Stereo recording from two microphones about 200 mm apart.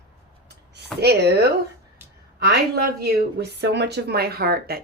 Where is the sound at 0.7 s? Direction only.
55° right (ahead or behind).